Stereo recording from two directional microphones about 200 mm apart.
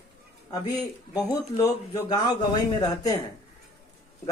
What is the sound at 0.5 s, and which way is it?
A man's voice, 20° left (ahead or behind).